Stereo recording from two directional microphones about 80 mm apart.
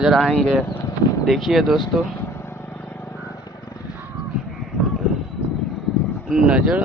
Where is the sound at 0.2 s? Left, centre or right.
Centre.